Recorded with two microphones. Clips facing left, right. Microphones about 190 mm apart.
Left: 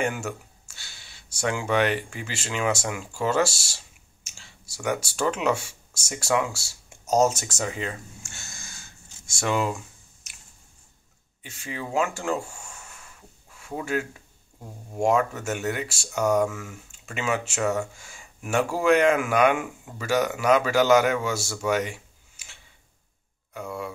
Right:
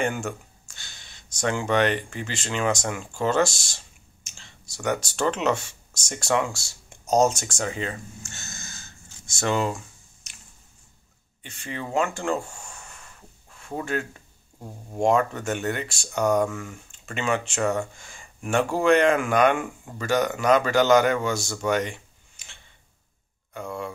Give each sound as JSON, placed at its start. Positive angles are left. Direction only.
{"t": 0.0, "sound": "speech", "side_deg": 5}
{"t": 11.4, "sound": "a sound", "side_deg": 5}
{"t": 15.0, "sound": "speech", "side_deg": 5}